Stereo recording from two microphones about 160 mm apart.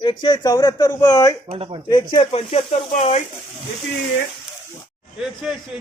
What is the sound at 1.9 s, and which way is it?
Speech, 30° left (ahead or behind).